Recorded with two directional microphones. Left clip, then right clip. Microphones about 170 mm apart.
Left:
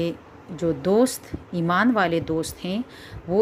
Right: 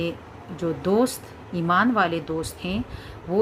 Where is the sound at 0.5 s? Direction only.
35° left (ahead or behind).